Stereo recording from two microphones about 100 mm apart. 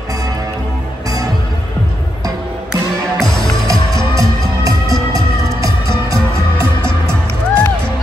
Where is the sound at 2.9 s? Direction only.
35° right (ahead or behind).